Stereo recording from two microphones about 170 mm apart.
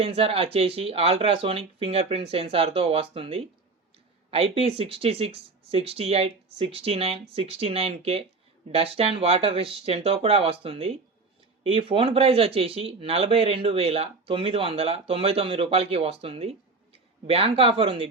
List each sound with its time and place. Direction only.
0.0 s speech: 35° right (ahead or behind)